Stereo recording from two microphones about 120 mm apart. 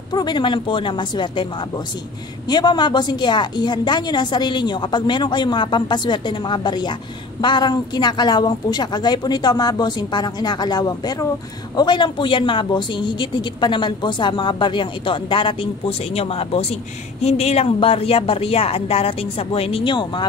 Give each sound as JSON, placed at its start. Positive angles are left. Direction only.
{"t": 0.1, "sound": "a woman's voice", "side_deg": 35}